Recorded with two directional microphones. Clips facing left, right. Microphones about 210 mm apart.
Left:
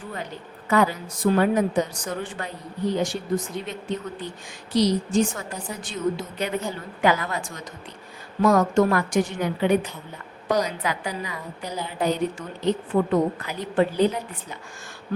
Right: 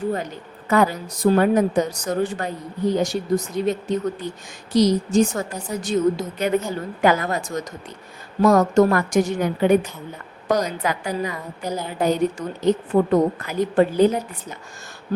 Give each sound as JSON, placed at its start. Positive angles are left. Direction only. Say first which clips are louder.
{"t": 0.7, "sound": "a woman's voice", "louder": "right 2 dB", "side_deg": -45}